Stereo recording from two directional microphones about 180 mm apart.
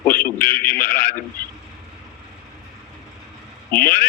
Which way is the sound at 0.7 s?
50° left (ahead or behind).